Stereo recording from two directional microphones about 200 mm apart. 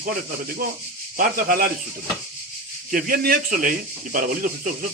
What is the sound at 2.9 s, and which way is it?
Speech, 45° right (ahead or behind).